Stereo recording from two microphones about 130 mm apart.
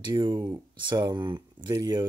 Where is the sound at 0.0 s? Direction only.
35° right (ahead or behind).